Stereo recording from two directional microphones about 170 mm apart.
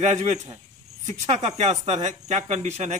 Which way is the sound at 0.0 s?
40° right (ahead or behind).